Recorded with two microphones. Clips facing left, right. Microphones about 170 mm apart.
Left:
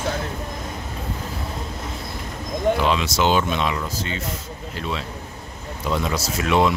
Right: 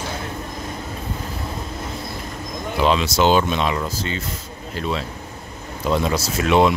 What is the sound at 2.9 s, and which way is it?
Speech, 35° right (ahead or behind).